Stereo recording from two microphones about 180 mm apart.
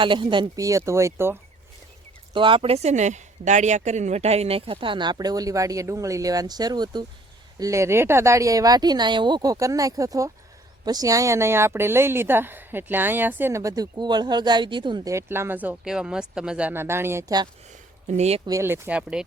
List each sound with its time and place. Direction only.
0.0 s speech: 25° right (ahead or behind)
2.3 s speech: 25° right (ahead or behind)
18.1 s speech: 35° right (ahead or behind)
18.4 s speech: 15° right (ahead or behind)